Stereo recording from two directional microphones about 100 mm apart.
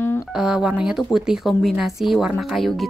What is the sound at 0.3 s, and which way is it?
Speech, 5° right (ahead or behind).